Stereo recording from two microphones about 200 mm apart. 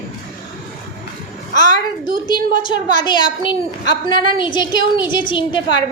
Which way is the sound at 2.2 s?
25° left (ahead or behind).